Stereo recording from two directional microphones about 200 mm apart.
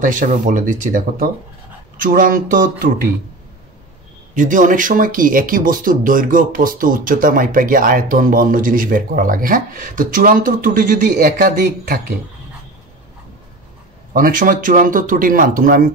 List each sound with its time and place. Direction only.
0.0 s speech: 40° right (ahead or behind)
4.4 s speech: 40° right (ahead or behind)
14.1 s speech: 45° right (ahead or behind)